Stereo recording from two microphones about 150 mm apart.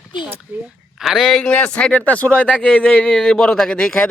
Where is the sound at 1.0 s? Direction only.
Centre (ahead or behind).